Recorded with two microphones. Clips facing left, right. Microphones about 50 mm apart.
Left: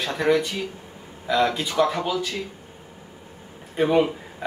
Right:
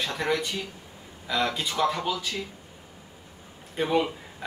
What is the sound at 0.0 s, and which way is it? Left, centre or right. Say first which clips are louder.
A man's voice: left 6 dB; centre.